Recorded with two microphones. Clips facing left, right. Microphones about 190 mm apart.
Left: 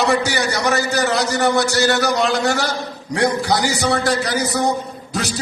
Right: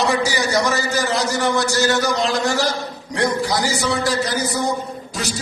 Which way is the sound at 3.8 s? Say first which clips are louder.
Left 2 dB; 65° left (ahead or behind).